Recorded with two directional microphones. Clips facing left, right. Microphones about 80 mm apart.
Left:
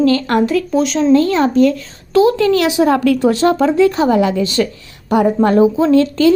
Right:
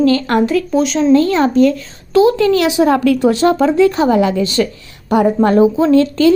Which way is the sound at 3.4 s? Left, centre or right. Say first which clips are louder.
Right 1 dB; right.